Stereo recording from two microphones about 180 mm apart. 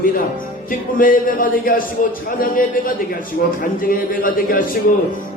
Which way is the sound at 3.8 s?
50° left (ahead or behind).